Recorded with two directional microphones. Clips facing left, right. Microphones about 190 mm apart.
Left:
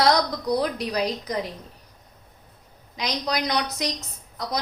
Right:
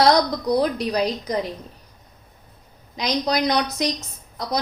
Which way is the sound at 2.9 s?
30° right (ahead or behind).